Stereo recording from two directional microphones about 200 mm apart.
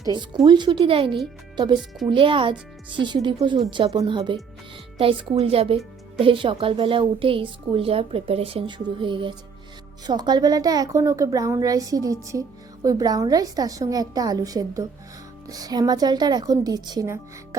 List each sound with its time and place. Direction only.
0.0 s a woman's voice: 20° right (ahead or behind)